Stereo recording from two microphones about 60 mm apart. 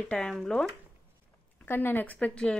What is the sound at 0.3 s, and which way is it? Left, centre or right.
Speech, centre.